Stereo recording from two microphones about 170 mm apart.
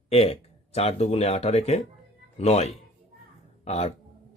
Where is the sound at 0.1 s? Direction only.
35° left (ahead or behind).